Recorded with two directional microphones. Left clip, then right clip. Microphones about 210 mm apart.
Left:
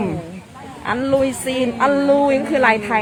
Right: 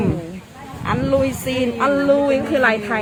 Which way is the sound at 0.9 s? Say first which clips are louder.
Left 1 dB; 10° left (ahead or behind).